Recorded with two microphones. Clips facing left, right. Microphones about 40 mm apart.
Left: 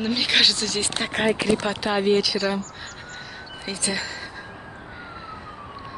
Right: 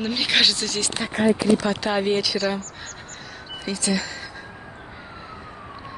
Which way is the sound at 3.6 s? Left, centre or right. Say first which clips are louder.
Right 3 dB; left.